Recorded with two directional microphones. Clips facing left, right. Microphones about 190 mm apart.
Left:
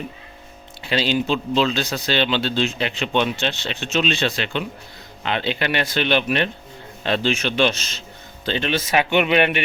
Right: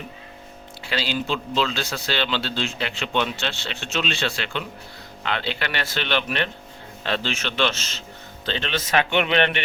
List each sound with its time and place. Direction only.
0.9 s speech: 20° left (ahead or behind)